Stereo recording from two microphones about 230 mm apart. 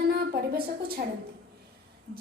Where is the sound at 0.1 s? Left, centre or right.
Right.